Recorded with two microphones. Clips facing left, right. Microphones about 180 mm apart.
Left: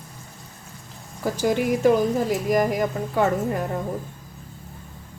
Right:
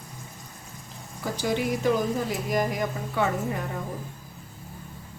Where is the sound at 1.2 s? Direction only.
45° left (ahead or behind).